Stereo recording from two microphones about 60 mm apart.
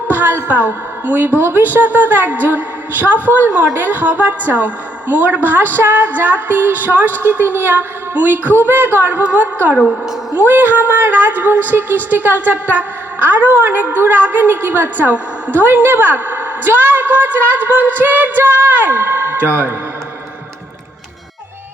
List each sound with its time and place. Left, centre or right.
0.1 s a woman's voice: right